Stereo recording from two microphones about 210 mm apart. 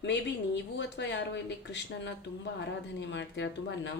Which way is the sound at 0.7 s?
55° left (ahead or behind).